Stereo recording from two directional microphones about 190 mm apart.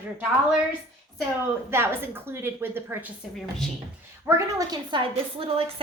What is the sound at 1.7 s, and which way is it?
A woman's voice, 10° right (ahead or behind).